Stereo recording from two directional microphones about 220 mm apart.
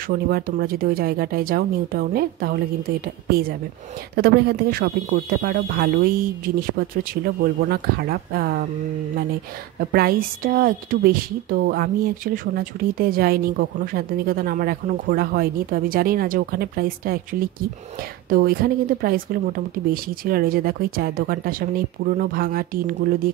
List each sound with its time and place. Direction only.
0.1 s speech: 45° right (ahead or behind)